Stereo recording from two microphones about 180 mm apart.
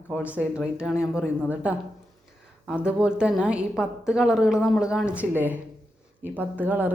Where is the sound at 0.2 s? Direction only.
10° right (ahead or behind).